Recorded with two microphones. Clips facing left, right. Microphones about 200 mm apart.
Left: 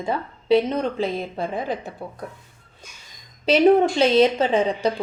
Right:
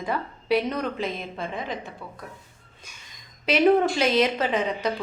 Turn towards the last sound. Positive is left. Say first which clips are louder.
# left 5 dB
turn(degrees=30)  # may be behind; listen again after turning